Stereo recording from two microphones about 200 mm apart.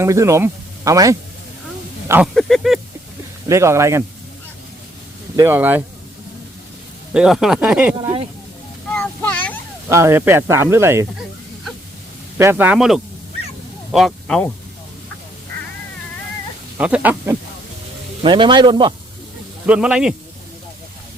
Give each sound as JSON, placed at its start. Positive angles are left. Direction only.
{"t": 0.0, "sound": "speech", "side_deg": -15}
{"t": 2.3, "sound": "speech", "side_deg": 5}
{"t": 3.5, "sound": "speech", "side_deg": -15}
{"t": 5.4, "sound": "speech", "side_deg": -10}
{"t": 7.1, "sound": "speech", "side_deg": -5}
{"t": 7.9, "sound": "a sound", "side_deg": -20}
{"t": 9.0, "sound": "a sound", "side_deg": 5}
{"t": 9.9, "sound": "speech", "side_deg": -10}
{"t": 12.4, "sound": "speech", "side_deg": -10}
{"t": 16.7, "sound": "speech", "side_deg": -5}
{"t": 18.2, "sound": "speech", "side_deg": -25}
{"t": 19.6, "sound": "speech", "side_deg": -5}